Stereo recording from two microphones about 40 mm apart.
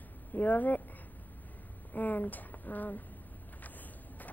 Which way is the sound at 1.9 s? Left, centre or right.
Left.